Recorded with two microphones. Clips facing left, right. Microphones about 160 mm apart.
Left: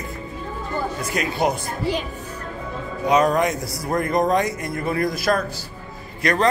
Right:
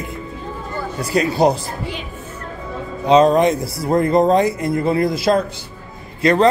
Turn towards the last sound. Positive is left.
turn(degrees=-25)  # may be behind; listen again after turning